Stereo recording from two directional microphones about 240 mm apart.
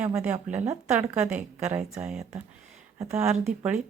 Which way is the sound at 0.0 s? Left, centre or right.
Centre.